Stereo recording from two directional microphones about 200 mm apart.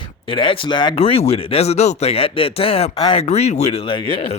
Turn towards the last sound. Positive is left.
turn(degrees=30)  # may be behind; listen again after turning